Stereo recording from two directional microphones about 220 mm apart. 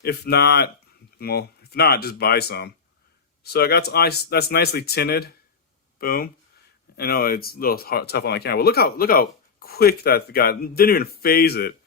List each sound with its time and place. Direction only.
0.0 s speech: 45° left (ahead or behind)